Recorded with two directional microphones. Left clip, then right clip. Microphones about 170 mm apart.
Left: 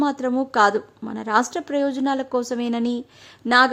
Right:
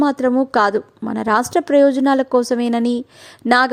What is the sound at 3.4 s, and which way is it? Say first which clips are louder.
Speech: right 3 dB; 20° right (ahead or behind).